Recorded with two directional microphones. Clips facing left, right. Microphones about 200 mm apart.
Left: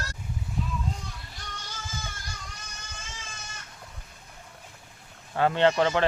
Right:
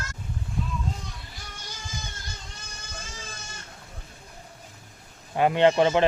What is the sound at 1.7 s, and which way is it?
Music, 20° right (ahead or behind).